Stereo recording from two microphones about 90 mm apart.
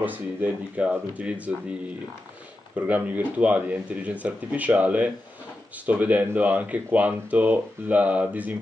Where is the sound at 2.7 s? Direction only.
20° right (ahead or behind).